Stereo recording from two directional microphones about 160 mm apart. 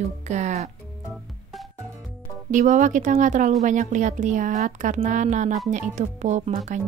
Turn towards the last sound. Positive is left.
turn(degrees=-50)  # may be behind; listen again after turning